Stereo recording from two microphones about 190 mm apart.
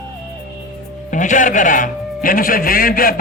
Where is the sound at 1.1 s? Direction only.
40° left (ahead or behind).